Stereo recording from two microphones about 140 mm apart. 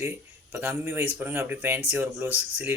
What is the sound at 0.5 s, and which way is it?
Speech, 15° right (ahead or behind).